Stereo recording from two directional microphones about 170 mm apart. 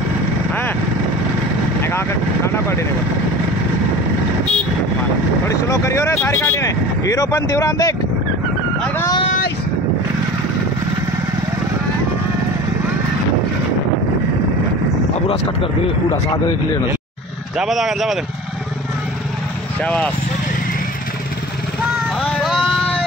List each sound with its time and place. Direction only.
1.8 s vehicle: 15° left (ahead or behind)
5.5 s speech: 15° left (ahead or behind)
15.2 s speech: 25° left (ahead or behind)
17.6 s speech: centre (ahead or behind)
19.8 s speech: 5° left (ahead or behind)
22.2 s a sound: centre (ahead or behind)